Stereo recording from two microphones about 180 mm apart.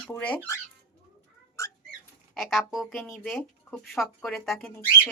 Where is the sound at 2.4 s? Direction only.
Centre (ahead or behind).